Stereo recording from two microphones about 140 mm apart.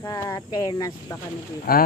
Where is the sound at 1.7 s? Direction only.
90° left.